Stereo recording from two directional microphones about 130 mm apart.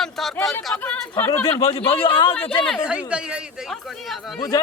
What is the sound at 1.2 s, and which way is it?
Speech, 20° left (ahead or behind).